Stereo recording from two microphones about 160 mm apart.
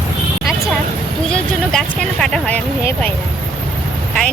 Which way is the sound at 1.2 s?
5° left (ahead or behind).